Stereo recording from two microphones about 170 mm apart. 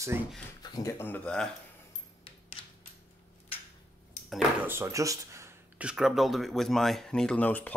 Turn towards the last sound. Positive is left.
turn(degrees=10)  # may be behind; listen again after turning